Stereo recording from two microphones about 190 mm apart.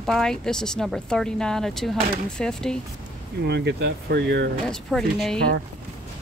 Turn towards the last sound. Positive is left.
turn(degrees=5)  # may be behind; listen again after turning